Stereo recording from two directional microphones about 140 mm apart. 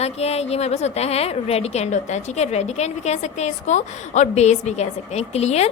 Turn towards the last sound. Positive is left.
turn(degrees=50)  # may be behind; listen again after turning